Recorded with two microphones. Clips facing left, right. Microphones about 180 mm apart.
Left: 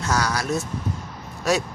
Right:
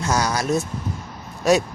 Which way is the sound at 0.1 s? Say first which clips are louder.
Right 2 dB; 20° right (ahead or behind).